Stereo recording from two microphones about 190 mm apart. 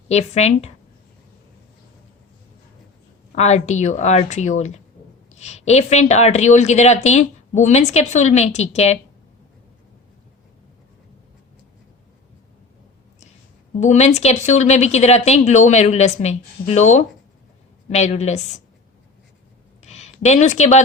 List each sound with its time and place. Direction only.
0.1 s speech: 35° left (ahead or behind)
3.3 s speech: 35° left (ahead or behind)
13.7 s speech: 35° left (ahead or behind)
19.8 s a sound: 35° left (ahead or behind)